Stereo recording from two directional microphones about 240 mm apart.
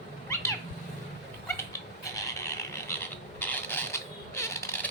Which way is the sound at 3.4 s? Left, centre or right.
Centre.